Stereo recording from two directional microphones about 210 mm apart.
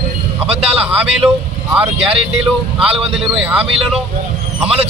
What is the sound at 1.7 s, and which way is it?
A man's voice, 5° right (ahead or behind).